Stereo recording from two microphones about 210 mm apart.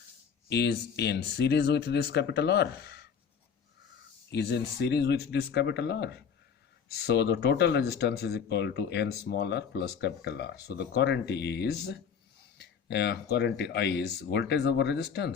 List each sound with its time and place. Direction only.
0.4 s speech: 55° left (ahead or behind)
4.3 s speech: 55° left (ahead or behind)